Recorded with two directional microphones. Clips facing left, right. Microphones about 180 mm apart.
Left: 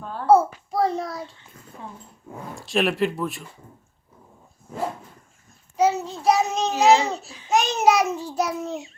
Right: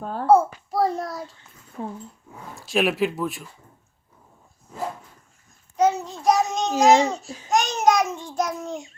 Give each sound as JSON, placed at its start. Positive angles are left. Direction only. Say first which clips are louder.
{"t": 0.0, "sound": "a sound", "louder": "right 4 dB", "side_deg": -45}
{"t": 0.3, "sound": "child singing", "louder": "even", "side_deg": 0}
{"t": 1.8, "sound": "speech", "louder": "right 8 dB", "side_deg": -45}
{"t": 2.6, "sound": "speech", "louder": "even", "side_deg": 0}
{"t": 5.7, "sound": "child singing", "louder": "even", "side_deg": 5}
{"t": 7.3, "sound": "babbling", "louder": "right 7 dB", "side_deg": -45}
{"t": 7.5, "sound": "babbling", "louder": "left 1 dB", "side_deg": 5}